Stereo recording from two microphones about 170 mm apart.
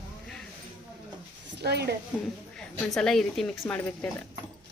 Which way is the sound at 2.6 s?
5° left (ahead or behind).